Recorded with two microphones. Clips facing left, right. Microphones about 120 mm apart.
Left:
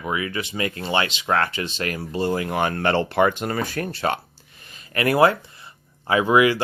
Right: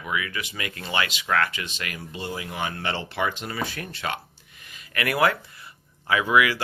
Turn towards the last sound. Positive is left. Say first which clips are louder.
# left 4 dB
turn(degrees=25)  # may be behind; listen again after turning